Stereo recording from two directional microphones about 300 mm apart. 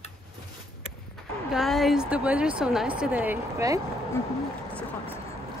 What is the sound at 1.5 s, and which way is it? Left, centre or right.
A woman's voice, centre.